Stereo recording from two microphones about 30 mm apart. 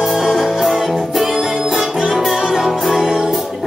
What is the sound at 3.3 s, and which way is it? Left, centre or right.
Music, centre.